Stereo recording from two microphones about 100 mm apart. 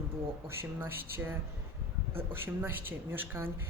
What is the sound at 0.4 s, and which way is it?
Speech, 25° right (ahead or behind).